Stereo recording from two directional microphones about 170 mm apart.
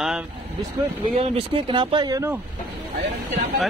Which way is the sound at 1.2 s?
30° right (ahead or behind).